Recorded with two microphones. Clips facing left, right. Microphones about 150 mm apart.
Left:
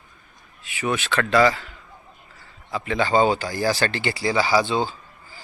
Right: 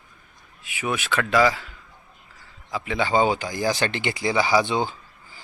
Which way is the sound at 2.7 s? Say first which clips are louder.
Left 2 dB; 10° right (ahead or behind).